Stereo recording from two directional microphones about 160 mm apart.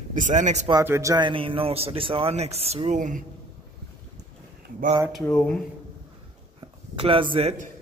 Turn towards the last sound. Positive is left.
turn(degrees=-35)  # may be behind; listen again after turning